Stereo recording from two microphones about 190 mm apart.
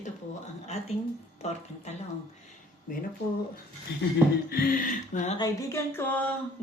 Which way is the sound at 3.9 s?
60° left (ahead or behind).